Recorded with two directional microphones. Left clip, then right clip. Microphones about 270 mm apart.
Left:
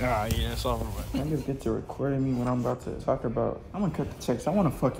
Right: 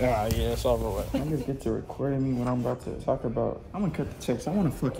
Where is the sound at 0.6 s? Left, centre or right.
Left.